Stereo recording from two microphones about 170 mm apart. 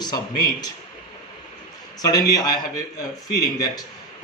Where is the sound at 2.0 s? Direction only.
20° left (ahead or behind).